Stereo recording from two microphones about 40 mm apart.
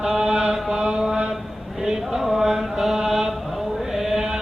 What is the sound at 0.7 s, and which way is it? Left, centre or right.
Mantra, centre.